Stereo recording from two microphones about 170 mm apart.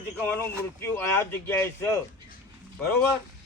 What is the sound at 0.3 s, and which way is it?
Speech, 10° left (ahead or behind).